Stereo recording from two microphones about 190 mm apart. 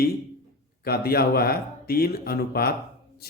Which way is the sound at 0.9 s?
55° left (ahead or behind).